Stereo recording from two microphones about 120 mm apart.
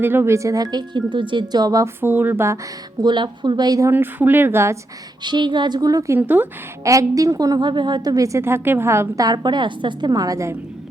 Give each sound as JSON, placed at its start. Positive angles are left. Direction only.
{"t": 0.0, "sound": "speech", "side_deg": -20}
{"t": 2.0, "sound": "a woman's voice", "side_deg": -15}
{"t": 3.0, "sound": "speech", "side_deg": -40}
{"t": 3.9, "sound": "a woman's voice", "side_deg": -15}
{"t": 5.2, "sound": "speech", "side_deg": -40}
{"t": 6.1, "sound": "a woman's voice", "side_deg": -15}
{"t": 6.8, "sound": "a woman's voice", "side_deg": -25}